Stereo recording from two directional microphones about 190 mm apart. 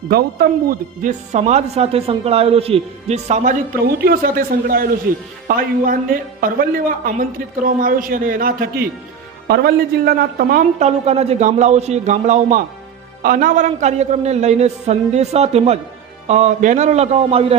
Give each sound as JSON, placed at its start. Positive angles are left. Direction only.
{"t": 0.1, "sound": "a man's voice", "side_deg": -55}